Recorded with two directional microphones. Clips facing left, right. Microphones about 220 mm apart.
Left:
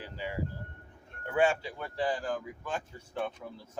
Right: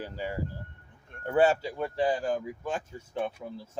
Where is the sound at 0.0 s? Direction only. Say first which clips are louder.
Right 3 dB; 45° right (ahead or behind).